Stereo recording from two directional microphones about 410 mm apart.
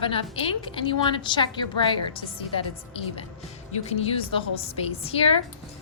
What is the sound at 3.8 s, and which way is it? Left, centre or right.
A woman's voice, centre.